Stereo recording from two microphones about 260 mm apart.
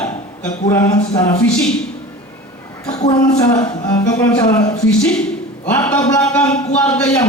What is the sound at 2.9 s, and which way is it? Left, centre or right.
Speech, centre.